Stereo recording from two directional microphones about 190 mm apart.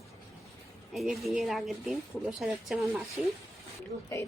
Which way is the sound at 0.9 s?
Centre (ahead or behind).